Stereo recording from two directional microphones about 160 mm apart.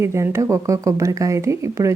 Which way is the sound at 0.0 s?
15° right (ahead or behind).